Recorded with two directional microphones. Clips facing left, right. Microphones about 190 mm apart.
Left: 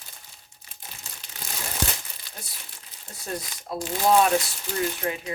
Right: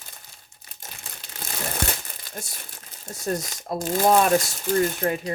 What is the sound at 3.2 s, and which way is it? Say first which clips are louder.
Speech: right 6 dB; 45° right (ahead or behind).